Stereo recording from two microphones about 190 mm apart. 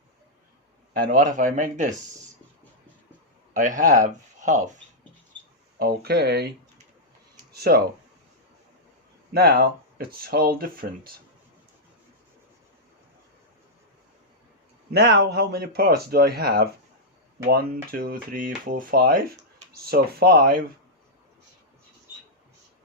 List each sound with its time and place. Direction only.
0.9 s speech: 50° right (ahead or behind)
3.5 s speech: 45° right (ahead or behind)
5.8 s speech: 55° right (ahead or behind)
7.5 s speech: 55° right (ahead or behind)
9.3 s speech: 55° right (ahead or behind)
14.9 s speech: 60° right (ahead or behind)
17.9 s speech: 50° right (ahead or behind)